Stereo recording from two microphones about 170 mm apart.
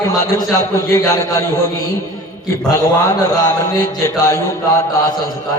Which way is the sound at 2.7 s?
20° left (ahead or behind).